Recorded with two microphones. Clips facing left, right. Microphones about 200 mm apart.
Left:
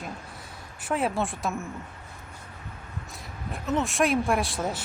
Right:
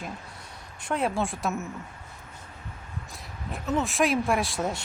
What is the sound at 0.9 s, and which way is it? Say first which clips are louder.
Speech: even; centre (ahead or behind).